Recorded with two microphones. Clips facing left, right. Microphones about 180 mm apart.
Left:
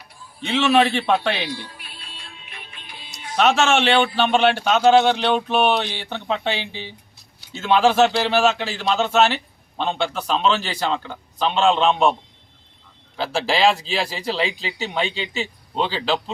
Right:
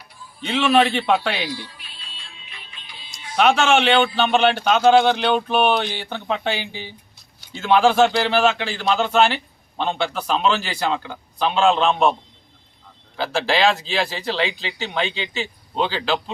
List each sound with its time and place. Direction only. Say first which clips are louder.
0.5 s a man's voice: even; 5° right (ahead or behind)
1.5 s music: even; 55° left (ahead or behind)
3.3 s a man's voice: right 1 dB; centre (ahead or behind)
13.1 s a man's voice: right 1 dB; centre (ahead or behind)